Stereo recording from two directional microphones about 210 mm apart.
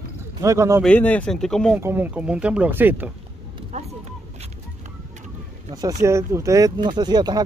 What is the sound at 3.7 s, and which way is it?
Vehicle, 30° right (ahead or behind).